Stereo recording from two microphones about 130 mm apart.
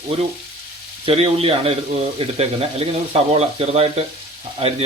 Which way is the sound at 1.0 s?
50° right (ahead or behind).